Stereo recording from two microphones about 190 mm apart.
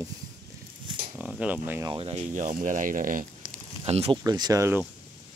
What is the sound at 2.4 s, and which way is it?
Speech, 40° right (ahead or behind).